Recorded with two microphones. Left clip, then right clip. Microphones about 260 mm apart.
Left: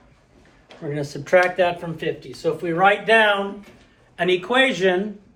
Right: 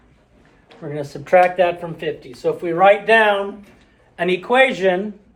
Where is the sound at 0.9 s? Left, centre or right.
Centre; by 4.9 s right.